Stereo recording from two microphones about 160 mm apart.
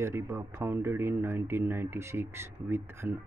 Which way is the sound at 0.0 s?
15° right (ahead or behind).